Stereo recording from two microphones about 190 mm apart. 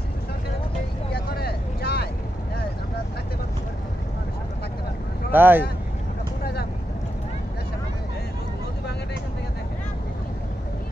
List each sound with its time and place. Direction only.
1.1 s vehicle: 55° left (ahead or behind)
5.3 s speech: 10° right (ahead or behind)
6.4 s vehicle: 55° left (ahead or behind)